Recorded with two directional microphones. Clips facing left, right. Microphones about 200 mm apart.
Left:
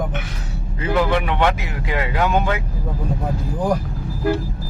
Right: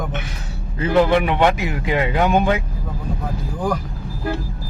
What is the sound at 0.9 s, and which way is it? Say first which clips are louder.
A man's voice: right 4 dB; 20° right (ahead or behind).